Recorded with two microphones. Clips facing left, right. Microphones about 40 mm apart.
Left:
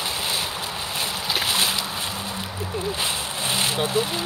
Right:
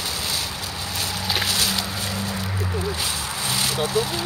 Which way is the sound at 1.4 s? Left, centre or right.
Left.